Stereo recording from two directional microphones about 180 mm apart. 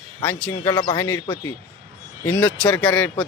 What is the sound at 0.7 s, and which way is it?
Speech, 25° left (ahead or behind).